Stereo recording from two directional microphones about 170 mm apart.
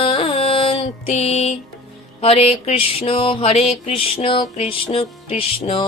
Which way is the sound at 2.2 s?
35° left (ahead or behind).